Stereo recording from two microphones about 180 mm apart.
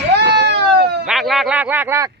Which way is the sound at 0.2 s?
70° right (ahead or behind).